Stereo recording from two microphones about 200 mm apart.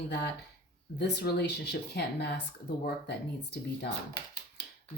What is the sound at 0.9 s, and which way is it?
Speech, 55° left (ahead or behind).